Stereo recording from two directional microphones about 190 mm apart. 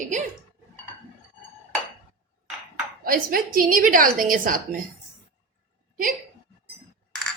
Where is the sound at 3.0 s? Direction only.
50° right (ahead or behind).